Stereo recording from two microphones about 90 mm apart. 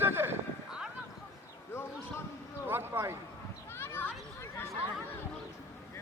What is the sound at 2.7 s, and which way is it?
Speech, 30° right (ahead or behind).